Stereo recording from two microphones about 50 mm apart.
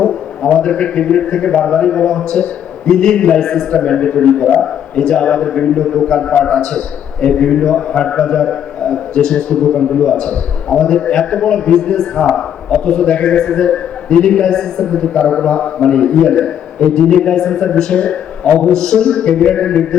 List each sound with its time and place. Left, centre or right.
0.0 s a man's voice: centre